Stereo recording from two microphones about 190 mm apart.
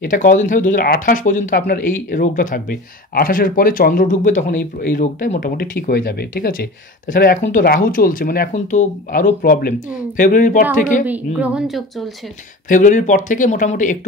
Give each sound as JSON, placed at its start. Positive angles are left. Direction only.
{"t": 0.0, "sound": "speech", "side_deg": 45}
{"t": 11.1, "sound": "speech", "side_deg": -5}
{"t": 12.6, "sound": "speech", "side_deg": 40}